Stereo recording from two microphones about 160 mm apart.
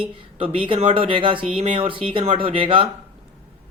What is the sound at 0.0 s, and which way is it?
Speech, 35° right (ahead or behind).